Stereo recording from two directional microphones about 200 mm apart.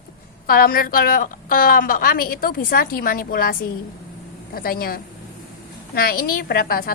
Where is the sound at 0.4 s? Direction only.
45° left (ahead or behind).